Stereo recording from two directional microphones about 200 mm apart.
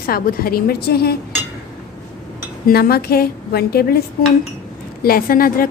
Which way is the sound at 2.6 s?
50° left (ahead or behind).